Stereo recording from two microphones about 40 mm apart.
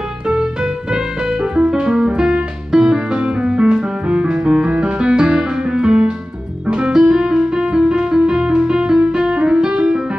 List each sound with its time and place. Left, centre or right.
0.9 s music: right